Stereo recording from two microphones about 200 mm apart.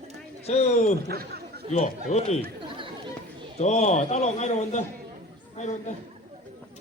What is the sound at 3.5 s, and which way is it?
A man's voice, 35° left (ahead or behind).